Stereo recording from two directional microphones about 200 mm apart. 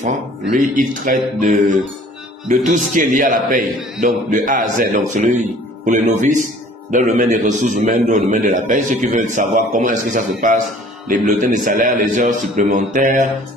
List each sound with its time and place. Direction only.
0.0 s a man's voice: 40° right (ahead or behind)